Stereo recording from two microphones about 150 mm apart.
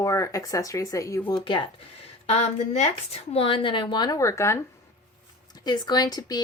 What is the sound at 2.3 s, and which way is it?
Speech, 45° left (ahead or behind).